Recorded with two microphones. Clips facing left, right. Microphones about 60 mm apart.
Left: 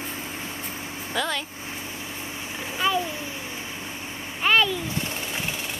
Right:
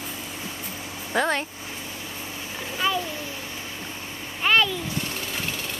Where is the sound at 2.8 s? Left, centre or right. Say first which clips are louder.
Left 1 dB; centre.